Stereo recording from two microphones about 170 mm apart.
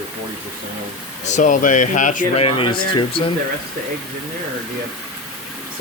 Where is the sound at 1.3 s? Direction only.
45° left (ahead or behind).